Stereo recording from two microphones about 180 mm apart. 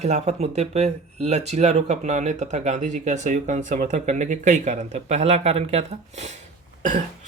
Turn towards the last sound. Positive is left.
turn(degrees=-45)  # may be behind; listen again after turning